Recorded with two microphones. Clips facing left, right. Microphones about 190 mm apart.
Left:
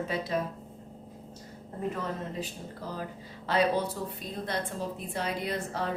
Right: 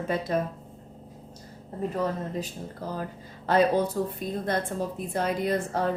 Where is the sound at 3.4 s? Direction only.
50° right (ahead or behind).